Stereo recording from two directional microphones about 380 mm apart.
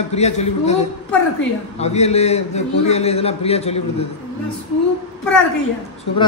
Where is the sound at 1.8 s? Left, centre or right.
Centre.